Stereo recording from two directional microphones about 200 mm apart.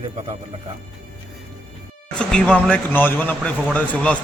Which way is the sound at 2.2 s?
5° left (ahead or behind).